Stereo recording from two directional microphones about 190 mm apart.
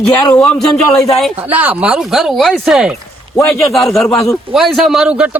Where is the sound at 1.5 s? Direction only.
10° right (ahead or behind).